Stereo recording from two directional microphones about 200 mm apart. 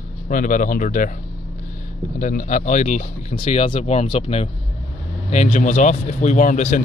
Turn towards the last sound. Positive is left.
turn(degrees=40)  # may be behind; listen again after turning